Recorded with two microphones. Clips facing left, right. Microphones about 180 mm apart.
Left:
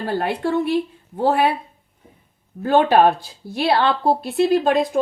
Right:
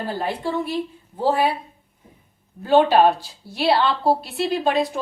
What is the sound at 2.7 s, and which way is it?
A woman's voice, 55° left (ahead or behind).